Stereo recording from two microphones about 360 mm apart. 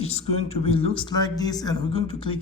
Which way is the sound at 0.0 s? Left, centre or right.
Centre.